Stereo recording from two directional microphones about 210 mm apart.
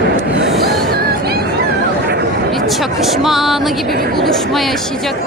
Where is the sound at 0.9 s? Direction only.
50° right (ahead or behind).